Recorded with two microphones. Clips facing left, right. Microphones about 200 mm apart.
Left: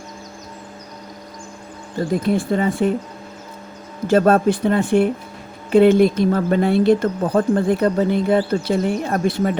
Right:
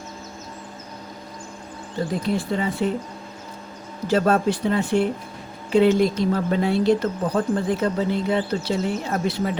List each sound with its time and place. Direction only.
2.2 s speech: 50° left (ahead or behind)
4.0 s speech: 55° left (ahead or behind)